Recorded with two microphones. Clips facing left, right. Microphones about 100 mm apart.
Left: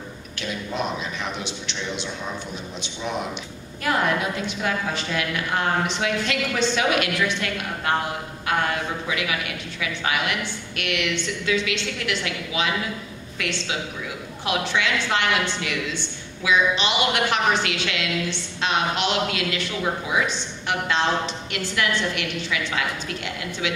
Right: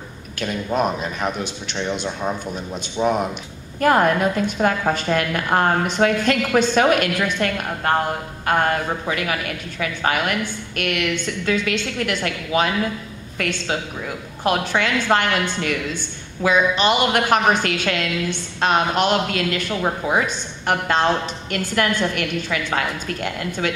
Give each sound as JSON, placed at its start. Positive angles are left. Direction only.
{"t": 0.4, "sound": "a woman's voice", "side_deg": -45}